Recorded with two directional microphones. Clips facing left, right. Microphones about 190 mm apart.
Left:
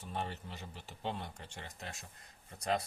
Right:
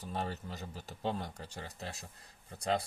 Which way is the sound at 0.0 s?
35° right (ahead or behind).